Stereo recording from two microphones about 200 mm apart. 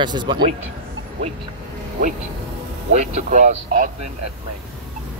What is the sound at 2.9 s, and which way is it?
Speech, 35° right (ahead or behind).